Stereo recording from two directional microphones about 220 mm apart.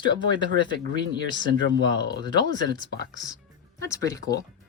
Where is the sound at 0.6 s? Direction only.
20° left (ahead or behind).